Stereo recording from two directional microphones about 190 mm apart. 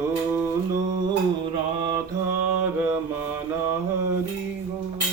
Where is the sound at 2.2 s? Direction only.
10° right (ahead or behind).